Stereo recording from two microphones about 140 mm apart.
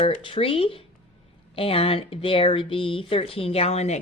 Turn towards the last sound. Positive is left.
turn(degrees=50)  # may be behind; listen again after turning